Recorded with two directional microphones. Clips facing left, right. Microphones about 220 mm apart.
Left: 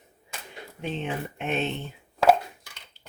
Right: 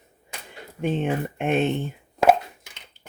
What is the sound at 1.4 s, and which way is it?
Speech, 50° right (ahead or behind).